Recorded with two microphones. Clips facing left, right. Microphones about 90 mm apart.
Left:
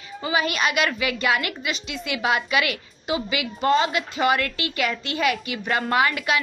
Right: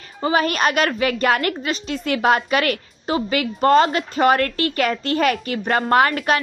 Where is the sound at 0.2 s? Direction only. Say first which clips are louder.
Right 5 dB; 45° right (ahead or behind).